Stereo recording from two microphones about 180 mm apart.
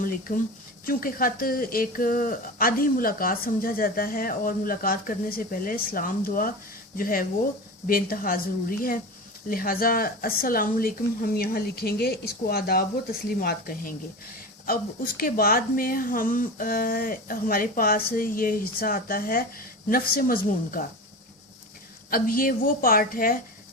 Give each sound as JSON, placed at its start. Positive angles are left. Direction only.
{"t": 0.0, "sound": "speech", "side_deg": 50}
{"t": 9.5, "sound": "speech", "side_deg": 55}
{"t": 15.2, "sound": "speech", "side_deg": 55}
{"t": 22.1, "sound": "speech", "side_deg": 55}